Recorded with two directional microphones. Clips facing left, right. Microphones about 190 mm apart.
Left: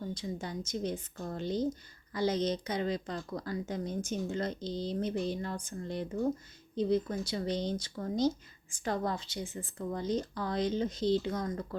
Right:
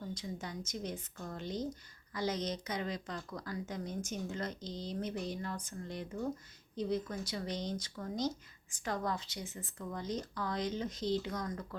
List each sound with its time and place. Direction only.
0.1 s a woman's voice: 30° left (ahead or behind)